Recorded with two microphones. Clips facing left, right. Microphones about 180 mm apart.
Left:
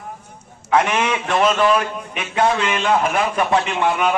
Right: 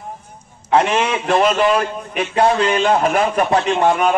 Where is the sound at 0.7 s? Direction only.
30° right (ahead or behind).